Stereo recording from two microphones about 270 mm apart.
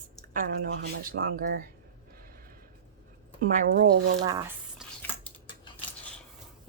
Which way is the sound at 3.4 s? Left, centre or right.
Right.